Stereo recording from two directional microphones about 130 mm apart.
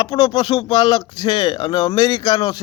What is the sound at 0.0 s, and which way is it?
Speech, 30° left (ahead or behind).